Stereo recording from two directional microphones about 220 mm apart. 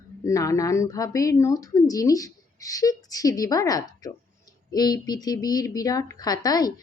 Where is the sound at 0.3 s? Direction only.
15° left (ahead or behind).